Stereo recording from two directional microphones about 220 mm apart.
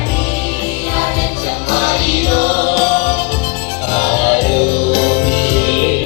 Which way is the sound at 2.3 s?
30° left (ahead or behind).